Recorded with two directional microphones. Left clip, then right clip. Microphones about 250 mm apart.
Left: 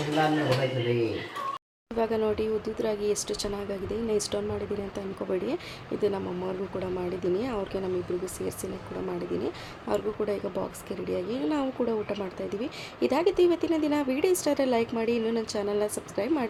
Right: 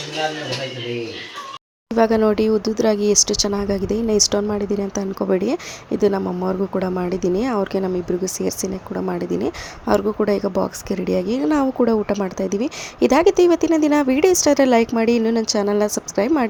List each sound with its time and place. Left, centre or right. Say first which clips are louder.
2.0 s speech: right 11 dB; right
9.1 s speech: right 7 dB; right